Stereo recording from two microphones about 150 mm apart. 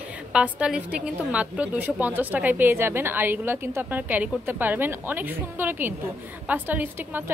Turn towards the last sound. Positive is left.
turn(degrees=-10)  # may be behind; listen again after turning